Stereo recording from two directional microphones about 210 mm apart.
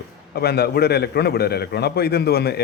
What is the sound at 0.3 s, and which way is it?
Speech, 50° left (ahead or behind).